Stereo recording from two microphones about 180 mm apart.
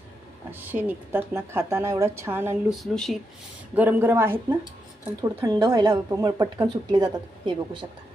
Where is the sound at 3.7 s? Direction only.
10° right (ahead or behind).